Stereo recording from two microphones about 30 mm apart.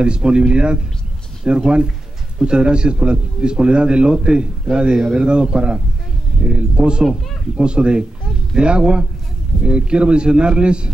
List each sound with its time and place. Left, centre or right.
0.0 s a man's voice: right